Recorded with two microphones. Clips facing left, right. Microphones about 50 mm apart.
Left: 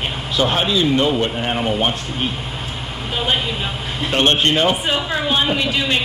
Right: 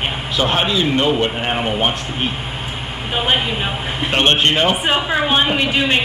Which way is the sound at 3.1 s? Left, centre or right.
Right.